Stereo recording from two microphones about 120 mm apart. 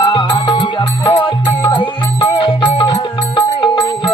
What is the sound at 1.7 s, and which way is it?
Music, 40° left (ahead or behind).